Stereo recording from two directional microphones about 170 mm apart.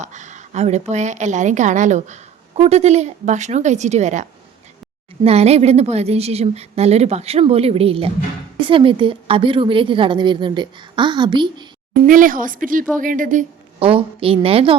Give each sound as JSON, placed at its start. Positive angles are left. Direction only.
{"t": 0.0, "sound": "a woman's voice", "side_deg": -45}
{"t": 12.0, "sound": "a woman's voice", "side_deg": -55}
{"t": 13.7, "sound": "a woman's voice", "side_deg": -35}